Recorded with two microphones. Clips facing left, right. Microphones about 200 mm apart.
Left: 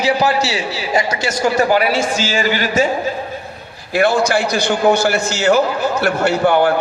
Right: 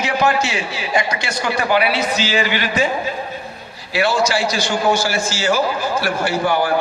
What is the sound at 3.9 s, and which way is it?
A man's voice, 55° left (ahead or behind).